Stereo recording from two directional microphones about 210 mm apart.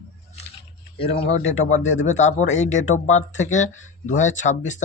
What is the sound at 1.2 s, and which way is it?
Speech, 30° left (ahead or behind).